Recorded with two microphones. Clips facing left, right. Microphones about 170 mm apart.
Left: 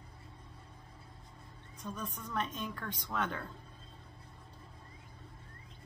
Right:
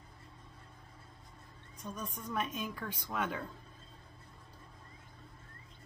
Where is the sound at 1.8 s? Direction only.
10° right (ahead or behind).